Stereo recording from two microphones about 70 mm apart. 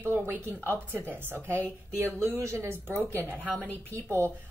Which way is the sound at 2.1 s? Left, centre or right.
Right.